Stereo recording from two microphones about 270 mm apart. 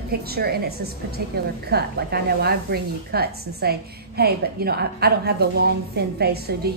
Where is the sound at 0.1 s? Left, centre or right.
Right.